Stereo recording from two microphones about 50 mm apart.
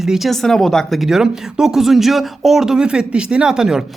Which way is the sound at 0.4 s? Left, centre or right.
Centre.